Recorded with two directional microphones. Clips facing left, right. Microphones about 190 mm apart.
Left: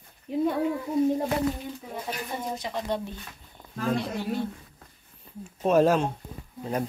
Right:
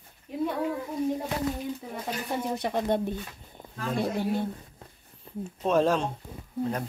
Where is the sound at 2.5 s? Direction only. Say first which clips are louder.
Right 5 dB; 55° right (ahead or behind).